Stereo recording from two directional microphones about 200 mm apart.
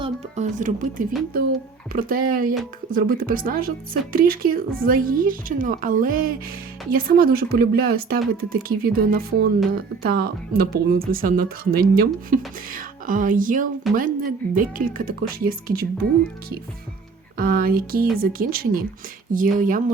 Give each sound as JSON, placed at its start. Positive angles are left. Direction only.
{"t": 0.0, "sound": "speech", "side_deg": -35}
{"t": 17.3, "sound": "speech", "side_deg": -45}